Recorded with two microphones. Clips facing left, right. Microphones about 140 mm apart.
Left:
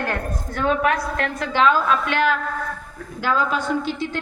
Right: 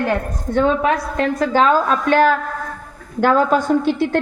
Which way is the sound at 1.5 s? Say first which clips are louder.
Right 1 dB; 40° right (ahead or behind).